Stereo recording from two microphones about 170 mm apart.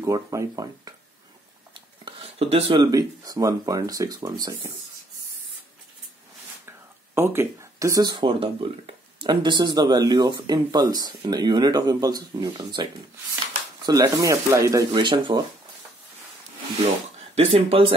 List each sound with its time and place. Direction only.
0.0 s speech: 20° right (ahead or behind)
2.0 s speech: 35° right (ahead or behind)
7.2 s speech: 15° right (ahead or behind)
8.2 s speech: 30° right (ahead or behind)
13.8 s speech: 20° right (ahead or behind)
14.9 s speech: 30° right (ahead or behind)
17.4 s speech: 35° right (ahead or behind)